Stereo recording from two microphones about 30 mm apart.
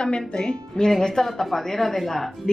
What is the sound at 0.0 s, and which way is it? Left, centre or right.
Speech, left.